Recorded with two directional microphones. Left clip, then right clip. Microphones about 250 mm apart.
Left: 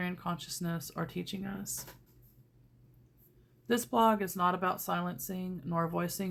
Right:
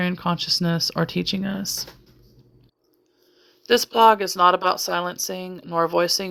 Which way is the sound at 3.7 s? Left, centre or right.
Right.